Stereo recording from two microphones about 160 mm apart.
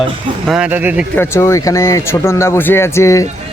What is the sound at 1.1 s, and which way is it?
Speech, 15° left (ahead or behind).